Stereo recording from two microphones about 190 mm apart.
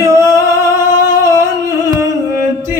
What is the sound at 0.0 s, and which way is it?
Singing, 15° right (ahead or behind).